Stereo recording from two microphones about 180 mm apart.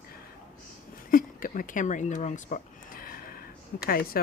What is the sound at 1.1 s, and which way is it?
Speech, 50° left (ahead or behind).